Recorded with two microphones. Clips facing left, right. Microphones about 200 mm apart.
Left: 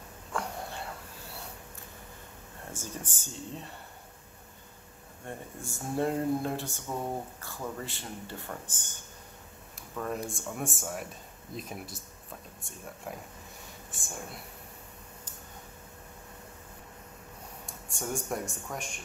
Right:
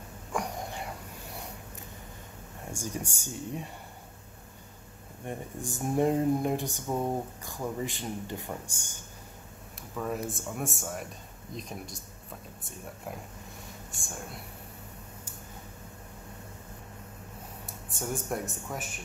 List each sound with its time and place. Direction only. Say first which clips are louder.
0.3 s a sound: right 2 dB; 15° right (ahead or behind)
2.7 s speech: right 5 dB; 15° right (ahead or behind)
5.2 s speech: right 4 dB; 15° right (ahead or behind)
9.9 s speech: right 1 dB; 5° right (ahead or behind)
17.6 s speech: right 1 dB; centre (ahead or behind)